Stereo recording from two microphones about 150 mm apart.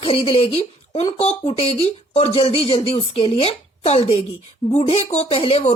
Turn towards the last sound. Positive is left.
turn(degrees=45)  # may be behind; listen again after turning